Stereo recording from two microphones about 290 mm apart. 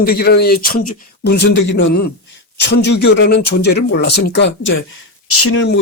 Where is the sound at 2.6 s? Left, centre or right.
Left.